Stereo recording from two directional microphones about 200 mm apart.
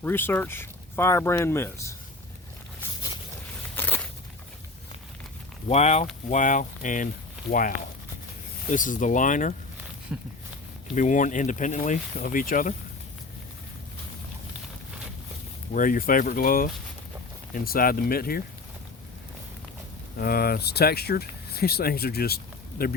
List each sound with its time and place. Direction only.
0.0 s speech: 10° left (ahead or behind)
3.8 s a sound: 10° left (ahead or behind)
5.6 s speech: 35° left (ahead or behind)
8.7 s speech: 40° left (ahead or behind)
10.1 s a sound: 5° right (ahead or behind)
10.9 s speech: 40° left (ahead or behind)
15.7 s speech: 45° left (ahead or behind)
20.1 s speech: 50° left (ahead or behind)